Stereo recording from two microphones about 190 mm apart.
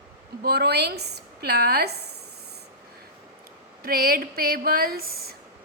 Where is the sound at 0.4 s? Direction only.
60° right (ahead or behind).